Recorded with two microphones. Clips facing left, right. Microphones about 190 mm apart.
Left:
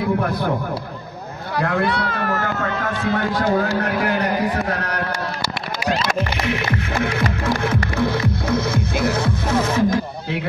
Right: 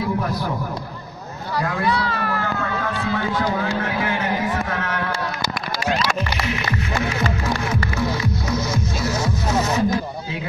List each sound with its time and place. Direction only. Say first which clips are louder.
1.6 s speech: left 2 dB; 60° left (ahead or behind); by 5.0 s 40° left (ahead or behind)
6.4 s music: left 3 dB; 60° left (ahead or behind)